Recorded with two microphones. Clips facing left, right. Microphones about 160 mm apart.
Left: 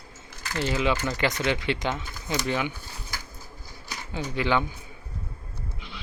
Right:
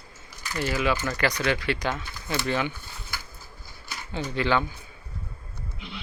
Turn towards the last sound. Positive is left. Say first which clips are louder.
# right 1 dB
turn(degrees=15)  # may be behind; listen again after turning